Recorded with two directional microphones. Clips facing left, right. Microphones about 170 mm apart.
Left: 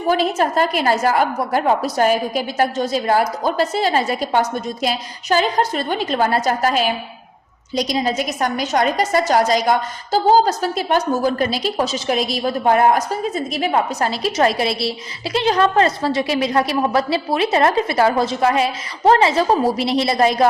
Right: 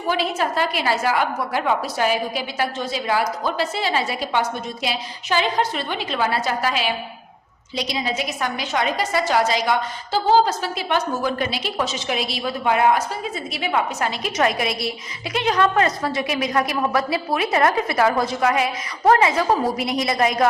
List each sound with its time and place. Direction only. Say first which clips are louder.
0.1 s a woman's voice: left 5 dB; 45° left (ahead or behind)